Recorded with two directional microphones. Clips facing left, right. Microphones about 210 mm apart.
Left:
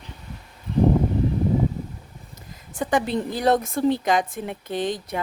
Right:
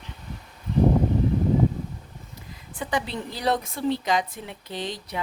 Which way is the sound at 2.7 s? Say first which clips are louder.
Left 6 dB; 45° left (ahead or behind).